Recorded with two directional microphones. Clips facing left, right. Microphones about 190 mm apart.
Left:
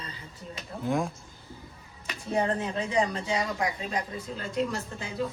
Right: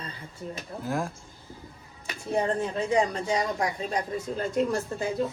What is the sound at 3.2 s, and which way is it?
Speech, 40° right (ahead or behind).